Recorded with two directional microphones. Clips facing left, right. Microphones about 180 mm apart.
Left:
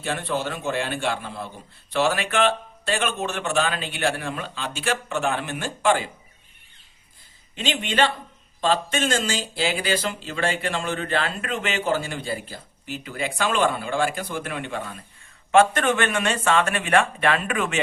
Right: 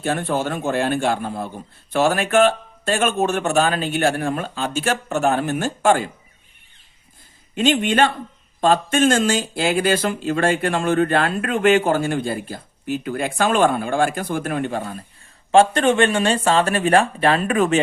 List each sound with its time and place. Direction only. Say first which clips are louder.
0.0 s speech: right 5 dB; 45° right (ahead or behind)
7.5 s speech: right 8 dB; 50° right (ahead or behind)
15.5 s speech: right 4 dB; 30° right (ahead or behind)